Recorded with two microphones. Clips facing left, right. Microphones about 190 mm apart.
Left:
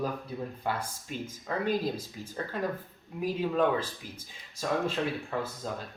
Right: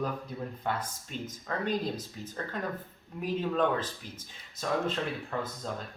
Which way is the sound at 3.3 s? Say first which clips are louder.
Left 1 dB; 10° left (ahead or behind).